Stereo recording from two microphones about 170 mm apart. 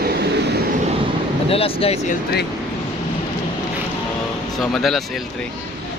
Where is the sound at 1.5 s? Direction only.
35° left (ahead or behind).